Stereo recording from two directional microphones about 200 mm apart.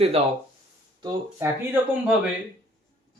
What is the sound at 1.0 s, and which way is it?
Speech, 15° right (ahead or behind).